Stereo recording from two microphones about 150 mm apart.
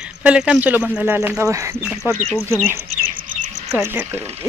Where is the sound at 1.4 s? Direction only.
20° right (ahead or behind).